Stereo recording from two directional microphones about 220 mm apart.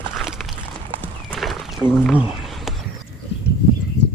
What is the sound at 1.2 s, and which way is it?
Clip-clop, centre (ahead or behind).